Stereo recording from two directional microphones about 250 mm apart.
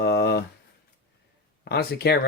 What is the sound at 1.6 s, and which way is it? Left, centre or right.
Speech, left.